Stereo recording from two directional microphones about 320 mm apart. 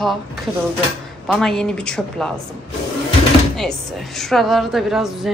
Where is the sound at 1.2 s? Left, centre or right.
Centre.